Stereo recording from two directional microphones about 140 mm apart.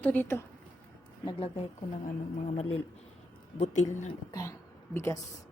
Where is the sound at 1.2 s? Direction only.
40° left (ahead or behind).